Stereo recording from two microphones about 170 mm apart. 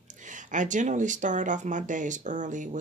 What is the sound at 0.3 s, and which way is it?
Speech, 50° right (ahead or behind).